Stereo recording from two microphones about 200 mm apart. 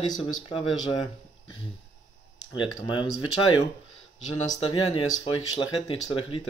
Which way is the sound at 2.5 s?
25° left (ahead or behind).